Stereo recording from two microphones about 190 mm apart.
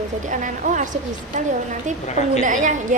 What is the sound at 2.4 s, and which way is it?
Speech, 40° right (ahead or behind).